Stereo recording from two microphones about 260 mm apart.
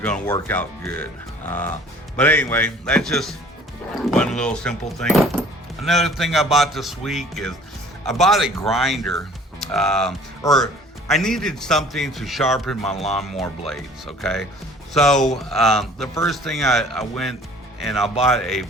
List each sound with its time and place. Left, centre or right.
0.0 s speech: centre
1.5 s music: centre
2.1 s speech: centre
10.4 s music: centre
11.1 s speech: centre
12.8 s speech: left
13.1 s speech: centre